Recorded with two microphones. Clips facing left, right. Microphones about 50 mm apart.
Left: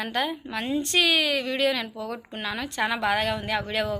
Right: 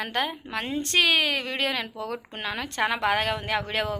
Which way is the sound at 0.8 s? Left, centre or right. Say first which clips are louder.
Right 2 dB; right.